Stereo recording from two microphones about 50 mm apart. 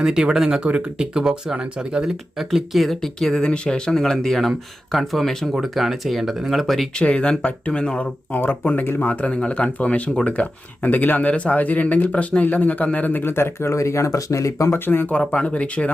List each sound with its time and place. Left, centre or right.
0.0 s speech: centre
2.5 s speech: centre
5.5 s speech: centre
7.0 s speech: left
7.9 s speech: left
11.3 s speech: left
14.7 s speech: left
15.2 s speech: left